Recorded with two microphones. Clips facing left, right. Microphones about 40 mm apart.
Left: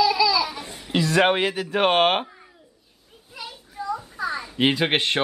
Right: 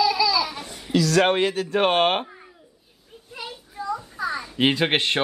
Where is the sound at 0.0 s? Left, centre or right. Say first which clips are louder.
Left 1 dB; centre.